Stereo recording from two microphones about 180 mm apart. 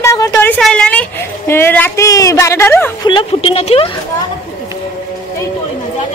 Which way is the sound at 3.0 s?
30° left (ahead or behind).